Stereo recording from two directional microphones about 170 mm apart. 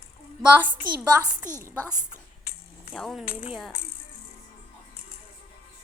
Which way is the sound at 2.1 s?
65° left (ahead or behind).